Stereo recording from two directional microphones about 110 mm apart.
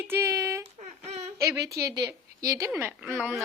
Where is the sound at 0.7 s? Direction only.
85° right.